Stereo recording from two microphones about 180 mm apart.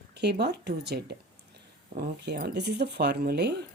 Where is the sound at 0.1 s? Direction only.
70° right (ahead or behind).